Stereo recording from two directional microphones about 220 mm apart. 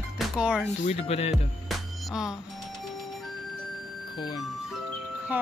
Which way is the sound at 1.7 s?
Centre (ahead or behind).